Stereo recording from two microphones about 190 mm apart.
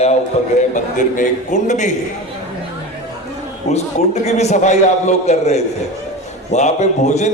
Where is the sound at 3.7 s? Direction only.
35° left (ahead or behind).